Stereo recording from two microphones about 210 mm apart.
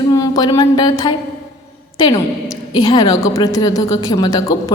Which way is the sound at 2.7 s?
20° left (ahead or behind).